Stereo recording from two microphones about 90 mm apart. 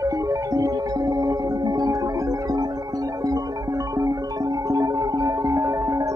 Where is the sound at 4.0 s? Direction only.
40° right (ahead or behind).